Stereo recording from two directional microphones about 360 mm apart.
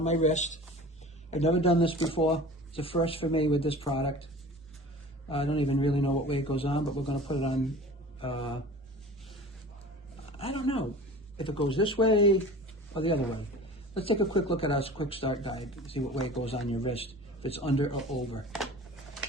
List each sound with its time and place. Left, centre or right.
0.0 s speech: centre
5.3 s speech: centre
10.3 s speech: centre
13.9 s speech: centre